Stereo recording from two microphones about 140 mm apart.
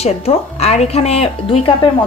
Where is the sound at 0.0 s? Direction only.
45° left (ahead or behind).